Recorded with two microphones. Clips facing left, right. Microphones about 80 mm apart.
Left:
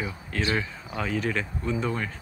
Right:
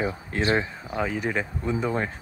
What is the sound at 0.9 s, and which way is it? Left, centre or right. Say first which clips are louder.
Speech: right 2 dB; centre.